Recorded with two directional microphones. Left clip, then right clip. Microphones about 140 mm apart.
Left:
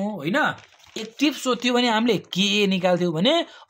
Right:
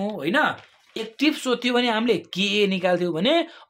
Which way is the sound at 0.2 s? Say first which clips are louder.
Right 1 dB; 30° left (ahead or behind).